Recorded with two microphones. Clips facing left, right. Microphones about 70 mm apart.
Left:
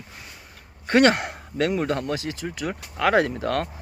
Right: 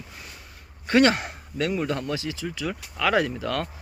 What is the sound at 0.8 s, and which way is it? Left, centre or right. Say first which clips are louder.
A man's voice: left 2 dB; left.